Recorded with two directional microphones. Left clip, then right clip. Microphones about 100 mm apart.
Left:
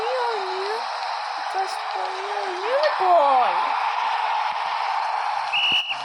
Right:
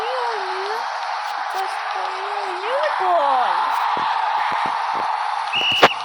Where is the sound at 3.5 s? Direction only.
40° left (ahead or behind).